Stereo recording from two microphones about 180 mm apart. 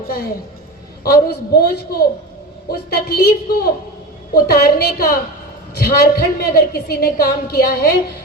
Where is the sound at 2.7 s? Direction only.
60° left (ahead or behind).